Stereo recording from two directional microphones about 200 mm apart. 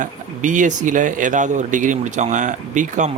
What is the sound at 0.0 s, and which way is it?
Speech, 40° right (ahead or behind).